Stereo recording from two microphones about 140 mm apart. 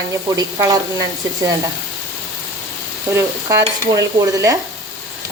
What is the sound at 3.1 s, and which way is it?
Stir, 20° right (ahead or behind).